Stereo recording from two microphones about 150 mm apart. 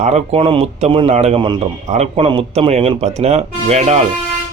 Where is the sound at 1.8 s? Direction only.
50° right (ahead or behind).